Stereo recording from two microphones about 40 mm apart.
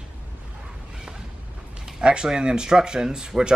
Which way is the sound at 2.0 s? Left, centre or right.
Right.